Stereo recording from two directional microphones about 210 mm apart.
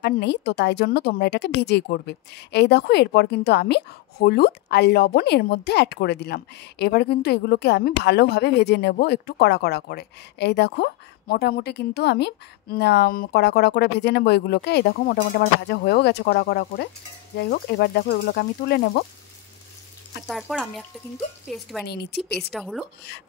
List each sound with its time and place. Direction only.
0.0 s a woman's voice: 55° left (ahead or behind)
20.2 s speech: centre (ahead or behind)
21.8 s a woman's voice: 50° left (ahead or behind)
22.5 s speech: centre (ahead or behind)